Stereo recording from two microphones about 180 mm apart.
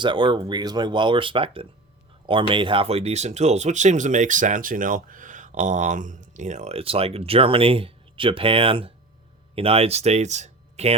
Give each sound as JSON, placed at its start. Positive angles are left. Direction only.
{"t": 0.0, "sound": "speech", "side_deg": -25}